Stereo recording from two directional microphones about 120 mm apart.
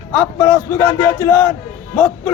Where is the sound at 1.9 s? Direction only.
10° left (ahead or behind).